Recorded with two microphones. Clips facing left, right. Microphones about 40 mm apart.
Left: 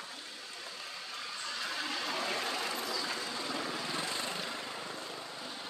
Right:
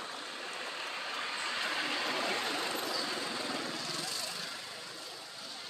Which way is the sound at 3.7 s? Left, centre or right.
Left.